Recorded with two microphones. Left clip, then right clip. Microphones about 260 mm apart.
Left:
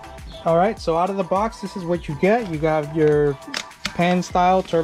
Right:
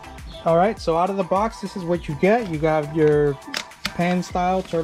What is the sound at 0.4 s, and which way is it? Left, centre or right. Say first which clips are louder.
Speech: even; centre.